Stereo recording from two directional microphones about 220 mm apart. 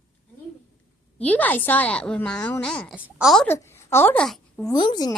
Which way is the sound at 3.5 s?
10° left (ahead or behind).